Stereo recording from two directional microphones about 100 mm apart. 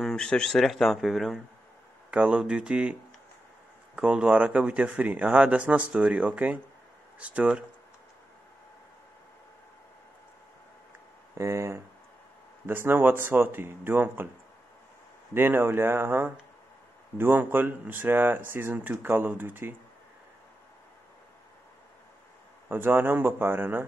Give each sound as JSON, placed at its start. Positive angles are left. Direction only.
{"t": 0.0, "sound": "speech", "side_deg": 5}
{"t": 11.3, "sound": "speech", "side_deg": -30}
{"t": 15.3, "sound": "speech", "side_deg": -20}
{"t": 22.7, "sound": "speech", "side_deg": -20}